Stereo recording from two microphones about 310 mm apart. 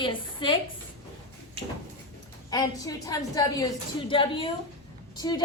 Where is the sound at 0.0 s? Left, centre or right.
Centre.